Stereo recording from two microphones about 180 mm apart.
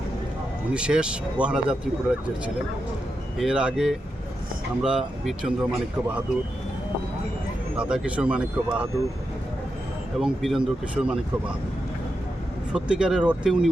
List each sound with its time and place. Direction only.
0.7 s speech: 5° right (ahead or behind)
3.3 s speech: 5° right (ahead or behind)
7.8 s speech: 5° right (ahead or behind)
10.2 s speech: centre (ahead or behind)
12.7 s speech: 5° right (ahead or behind)